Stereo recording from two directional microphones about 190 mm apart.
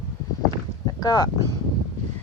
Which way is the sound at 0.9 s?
20° left (ahead or behind).